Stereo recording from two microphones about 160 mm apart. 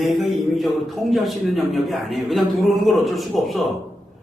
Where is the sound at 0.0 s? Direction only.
Centre (ahead or behind).